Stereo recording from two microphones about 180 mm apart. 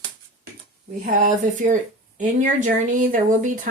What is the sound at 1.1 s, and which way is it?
Speech, 45° right (ahead or behind).